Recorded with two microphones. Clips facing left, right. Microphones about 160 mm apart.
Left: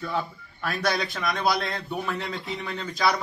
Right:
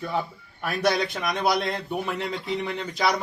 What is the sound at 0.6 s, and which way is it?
A man's voice, 15° right (ahead or behind).